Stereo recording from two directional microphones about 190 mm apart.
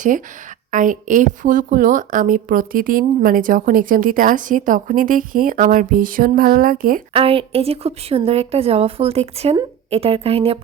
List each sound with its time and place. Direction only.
0.7 s a woman's voice: 45° right (ahead or behind)
7.1 s speech: 30° right (ahead or behind)